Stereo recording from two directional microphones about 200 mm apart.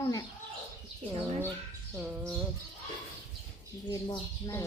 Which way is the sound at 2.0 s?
Centre (ahead or behind).